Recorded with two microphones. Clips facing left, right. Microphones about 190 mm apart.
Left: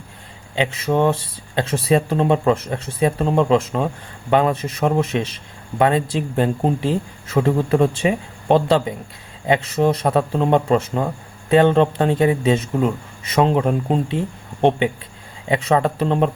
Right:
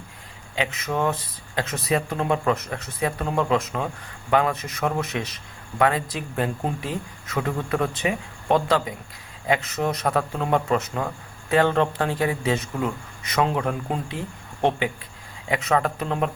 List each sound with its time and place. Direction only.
0.5 s speech: 30° left (ahead or behind)